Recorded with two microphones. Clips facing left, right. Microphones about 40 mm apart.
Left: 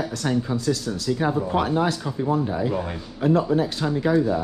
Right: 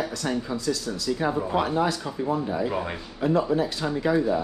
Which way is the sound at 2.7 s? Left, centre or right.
Centre.